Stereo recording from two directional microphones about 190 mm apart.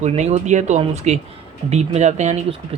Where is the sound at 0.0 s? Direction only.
35° right (ahead or behind).